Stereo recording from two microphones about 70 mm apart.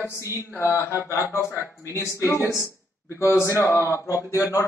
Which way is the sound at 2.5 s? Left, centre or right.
Left.